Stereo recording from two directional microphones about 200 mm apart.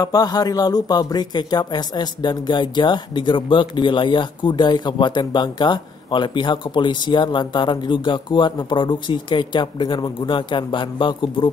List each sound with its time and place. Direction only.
0.0 s speech: 20° left (ahead or behind)